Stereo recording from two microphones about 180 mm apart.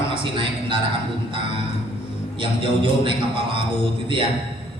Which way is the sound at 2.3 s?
30° right (ahead or behind).